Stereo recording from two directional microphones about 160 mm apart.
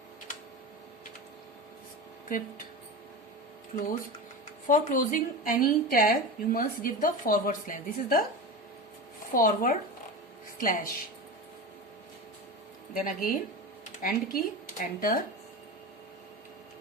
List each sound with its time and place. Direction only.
2.3 s speech: 60° left (ahead or behind)
4.6 s speech: 55° left (ahead or behind)
9.3 s speech: 60° left (ahead or behind)
12.9 s speech: 60° left (ahead or behind)